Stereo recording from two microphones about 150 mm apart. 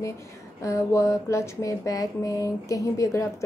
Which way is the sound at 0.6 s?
20° left (ahead or behind).